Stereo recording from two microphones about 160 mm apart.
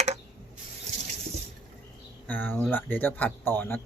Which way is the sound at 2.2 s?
10° left (ahead or behind).